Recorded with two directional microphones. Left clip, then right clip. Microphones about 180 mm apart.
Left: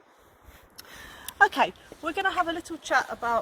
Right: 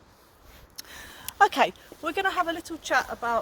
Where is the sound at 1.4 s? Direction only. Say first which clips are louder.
Right 1 dB; 40° right (ahead or behind).